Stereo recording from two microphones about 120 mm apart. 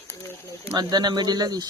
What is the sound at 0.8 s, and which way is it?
Speech, 35° right (ahead or behind).